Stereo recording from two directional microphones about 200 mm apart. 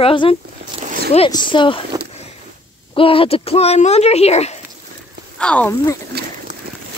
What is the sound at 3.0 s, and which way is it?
Speech, 25° left (ahead or behind).